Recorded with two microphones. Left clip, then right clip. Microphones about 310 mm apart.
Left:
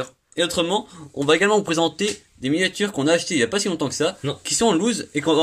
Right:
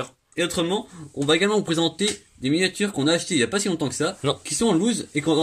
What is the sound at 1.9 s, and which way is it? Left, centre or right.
Speech, centre.